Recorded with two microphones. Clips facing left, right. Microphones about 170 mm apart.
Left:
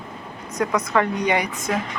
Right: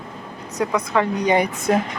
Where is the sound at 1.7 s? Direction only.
45° right (ahead or behind).